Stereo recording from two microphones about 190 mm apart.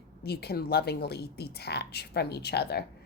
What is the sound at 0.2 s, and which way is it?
Speech, 55° left (ahead or behind).